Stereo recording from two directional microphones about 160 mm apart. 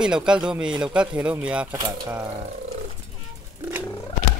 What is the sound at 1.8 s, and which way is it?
Speech, 20° right (ahead or behind).